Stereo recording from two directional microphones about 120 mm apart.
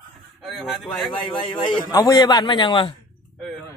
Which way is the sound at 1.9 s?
35° left (ahead or behind).